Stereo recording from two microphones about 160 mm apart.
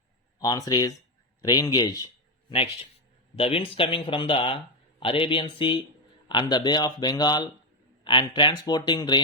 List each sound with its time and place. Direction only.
0.3 s speech: 20° left (ahead or behind)
2.5 s speech: 35° left (ahead or behind)